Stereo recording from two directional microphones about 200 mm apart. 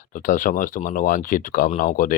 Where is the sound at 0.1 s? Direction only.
40° left (ahead or behind).